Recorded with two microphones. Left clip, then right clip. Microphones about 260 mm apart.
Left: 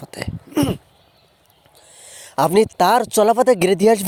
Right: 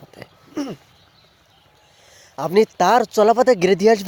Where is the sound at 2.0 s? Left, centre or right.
Left.